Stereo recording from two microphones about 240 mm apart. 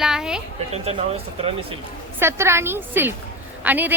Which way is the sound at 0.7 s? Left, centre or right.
Right.